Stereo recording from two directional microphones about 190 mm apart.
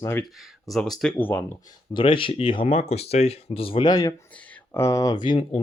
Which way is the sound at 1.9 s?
25° left (ahead or behind).